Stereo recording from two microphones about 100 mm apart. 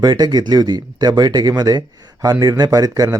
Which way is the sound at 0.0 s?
45° right (ahead or behind).